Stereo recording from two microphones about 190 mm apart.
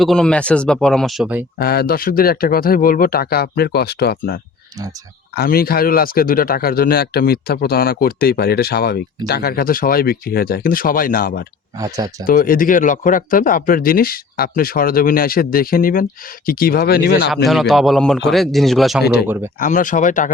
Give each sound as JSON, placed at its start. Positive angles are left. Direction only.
{"t": 0.0, "sound": "speech", "side_deg": 0}
{"t": 1.5, "sound": "speech", "side_deg": 55}
{"t": 5.4, "sound": "speech", "side_deg": 55}
{"t": 11.8, "sound": "speech", "side_deg": -15}
{"t": 12.2, "sound": "speech", "side_deg": 50}
{"t": 17.2, "sound": "speech", "side_deg": 0}
{"t": 19.5, "sound": "speech", "side_deg": 45}